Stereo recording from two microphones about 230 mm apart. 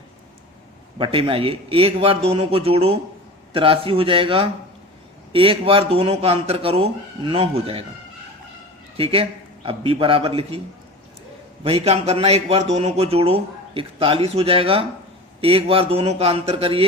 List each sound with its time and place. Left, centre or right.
0.9 s speech: right
9.0 s speech: right
11.6 s speech: right